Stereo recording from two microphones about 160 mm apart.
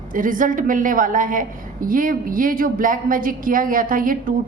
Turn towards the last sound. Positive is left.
turn(degrees=-60)  # may be behind; listen again after turning